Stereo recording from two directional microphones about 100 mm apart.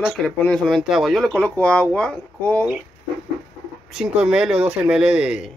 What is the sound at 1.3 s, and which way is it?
Speech, 15° left (ahead or behind).